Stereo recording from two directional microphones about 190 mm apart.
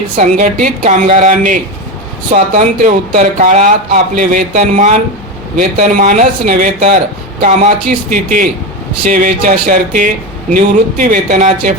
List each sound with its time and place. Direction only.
0.2 s speech: 40° right (ahead or behind)
8.1 s speech: 45° right (ahead or behind)